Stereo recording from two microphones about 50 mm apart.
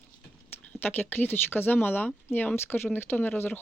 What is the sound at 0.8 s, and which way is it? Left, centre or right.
Speech, left.